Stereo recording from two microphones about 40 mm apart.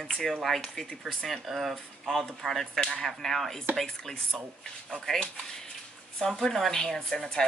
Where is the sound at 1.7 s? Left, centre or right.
Centre.